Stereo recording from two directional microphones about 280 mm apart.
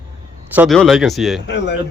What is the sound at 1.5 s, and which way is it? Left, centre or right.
Speech, left.